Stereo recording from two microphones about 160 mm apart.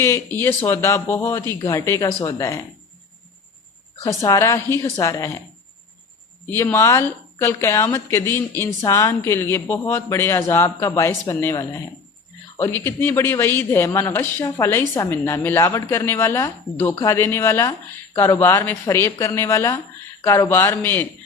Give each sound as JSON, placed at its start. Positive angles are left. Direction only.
{"t": 0.0, "sound": "speech", "side_deg": 15}
{"t": 4.0, "sound": "speech", "side_deg": 20}
{"t": 6.5, "sound": "speech", "side_deg": 15}